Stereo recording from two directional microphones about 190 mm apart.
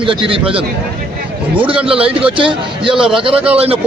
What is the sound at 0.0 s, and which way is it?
A man's voice, 30° right (ahead or behind).